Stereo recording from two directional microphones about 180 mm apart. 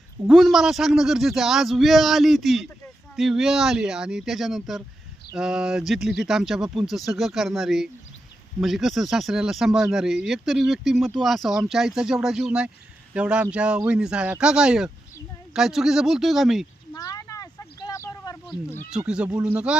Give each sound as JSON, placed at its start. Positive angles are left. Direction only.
{"t": 0.3, "sound": "speech", "side_deg": 0}
{"t": 16.9, "sound": "a sound", "side_deg": 20}
{"t": 18.9, "sound": "speech", "side_deg": -5}